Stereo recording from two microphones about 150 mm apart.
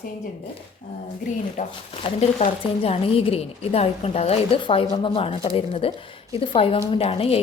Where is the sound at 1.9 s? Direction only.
40° left (ahead or behind).